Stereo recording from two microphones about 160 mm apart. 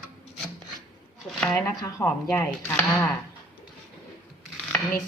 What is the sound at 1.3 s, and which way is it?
Speech, 5° left (ahead or behind).